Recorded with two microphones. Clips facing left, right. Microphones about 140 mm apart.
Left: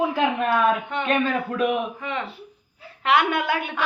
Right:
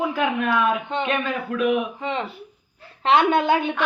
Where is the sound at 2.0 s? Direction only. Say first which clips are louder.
Right 3 dB; 25° right (ahead or behind).